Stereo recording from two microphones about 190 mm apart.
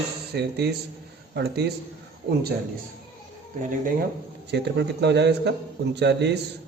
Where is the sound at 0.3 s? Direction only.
60° right (ahead or behind).